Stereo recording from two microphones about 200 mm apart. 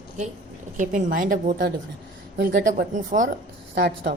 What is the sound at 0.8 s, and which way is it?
A woman's voice, 40° right (ahead or behind).